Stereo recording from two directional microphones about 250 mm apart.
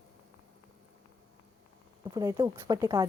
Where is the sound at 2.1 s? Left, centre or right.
Centre.